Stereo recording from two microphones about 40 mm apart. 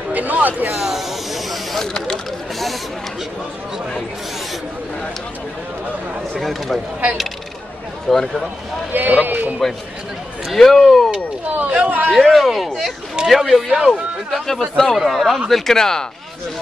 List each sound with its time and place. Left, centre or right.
0.1 s a sound: right
0.7 s mechanisms: centre
6.4 s speech: centre
8.1 s speech: centre
8.9 s speech: right
10.5 s speech: centre
11.5 s speech: right
12.1 s speech: centre